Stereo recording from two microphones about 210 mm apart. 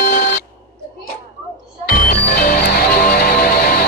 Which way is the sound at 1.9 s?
45° left (ahead or behind).